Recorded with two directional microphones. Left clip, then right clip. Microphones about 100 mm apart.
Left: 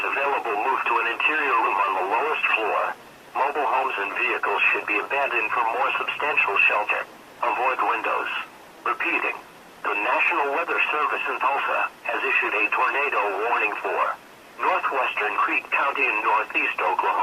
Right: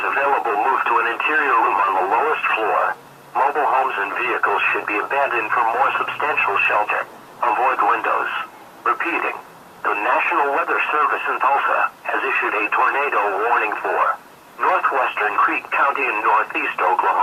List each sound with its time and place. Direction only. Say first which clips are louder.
0.0 s radio: right 5 dB; 30° left (ahead or behind)
3.3 s speech: right 5 dB; 35° left (ahead or behind)